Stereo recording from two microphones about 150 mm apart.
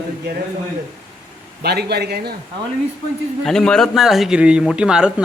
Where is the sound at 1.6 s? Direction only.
90° right.